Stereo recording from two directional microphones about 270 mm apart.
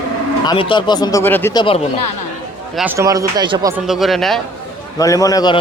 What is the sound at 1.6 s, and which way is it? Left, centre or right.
Speech, left.